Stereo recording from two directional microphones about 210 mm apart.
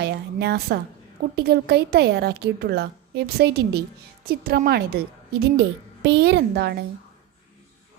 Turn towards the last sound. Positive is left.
turn(degrees=-50)  # may be behind; listen again after turning